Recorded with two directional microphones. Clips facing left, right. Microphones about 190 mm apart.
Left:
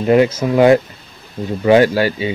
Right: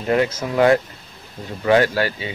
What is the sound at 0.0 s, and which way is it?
Speech, 15° left (ahead or behind).